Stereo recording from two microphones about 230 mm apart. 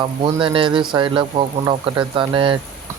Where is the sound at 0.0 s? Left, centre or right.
Right.